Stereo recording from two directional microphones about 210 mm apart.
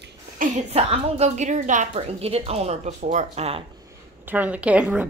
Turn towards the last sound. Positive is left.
turn(degrees=-5)  # may be behind; listen again after turning